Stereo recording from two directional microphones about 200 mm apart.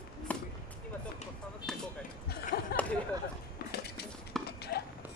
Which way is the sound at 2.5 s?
55° left (ahead or behind).